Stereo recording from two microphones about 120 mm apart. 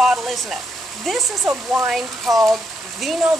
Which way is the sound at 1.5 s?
20° right (ahead or behind).